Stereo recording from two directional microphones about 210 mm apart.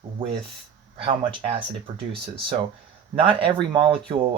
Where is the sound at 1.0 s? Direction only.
25° right (ahead or behind).